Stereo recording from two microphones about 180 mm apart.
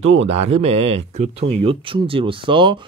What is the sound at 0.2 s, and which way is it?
Speech, 35° right (ahead or behind).